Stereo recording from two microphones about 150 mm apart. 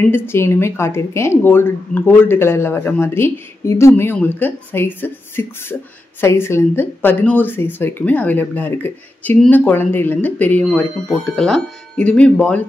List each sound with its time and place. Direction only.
0.1 s speech: 15° left (ahead or behind)